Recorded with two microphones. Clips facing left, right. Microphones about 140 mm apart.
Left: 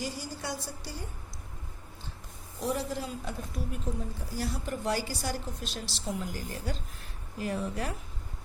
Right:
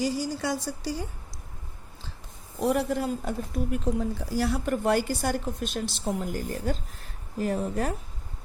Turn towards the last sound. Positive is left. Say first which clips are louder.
# right 5 dB
turn(degrees=-40)  # may be behind; listen again after turning